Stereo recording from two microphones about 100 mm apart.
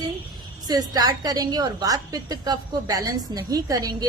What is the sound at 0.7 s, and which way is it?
A woman's voice, 40° right (ahead or behind).